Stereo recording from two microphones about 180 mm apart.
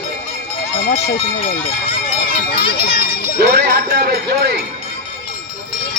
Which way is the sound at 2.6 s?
30° left (ahead or behind).